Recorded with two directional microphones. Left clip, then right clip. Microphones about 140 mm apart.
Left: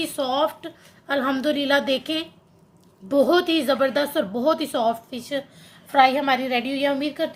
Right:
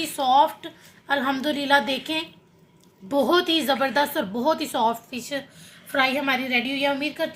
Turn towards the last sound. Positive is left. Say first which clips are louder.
# left 1 dB
turn(degrees=25)  # may be behind; listen again after turning